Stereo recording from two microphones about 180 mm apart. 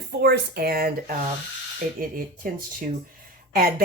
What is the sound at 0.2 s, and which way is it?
Speech, 60° right (ahead or behind).